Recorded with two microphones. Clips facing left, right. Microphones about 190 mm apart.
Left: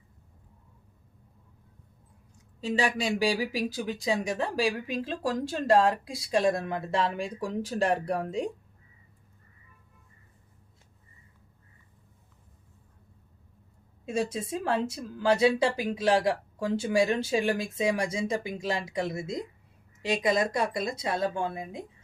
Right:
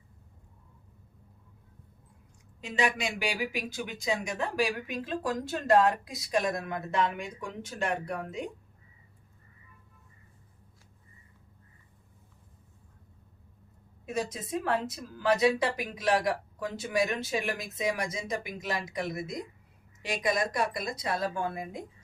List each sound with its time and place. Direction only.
2.6 s speech: 35° left (ahead or behind)
14.0 s speech: 30° left (ahead or behind)